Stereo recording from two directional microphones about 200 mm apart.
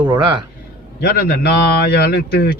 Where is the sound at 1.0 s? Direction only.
50° left (ahead or behind).